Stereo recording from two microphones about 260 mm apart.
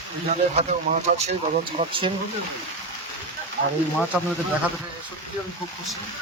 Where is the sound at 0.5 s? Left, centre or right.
Right.